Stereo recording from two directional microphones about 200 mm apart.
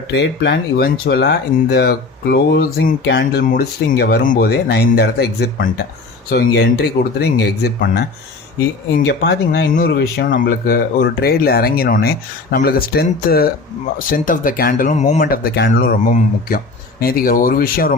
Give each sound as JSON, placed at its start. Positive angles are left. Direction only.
{"t": 0.1, "sound": "speech", "side_deg": 60}
{"t": 9.0, "sound": "speech", "side_deg": 55}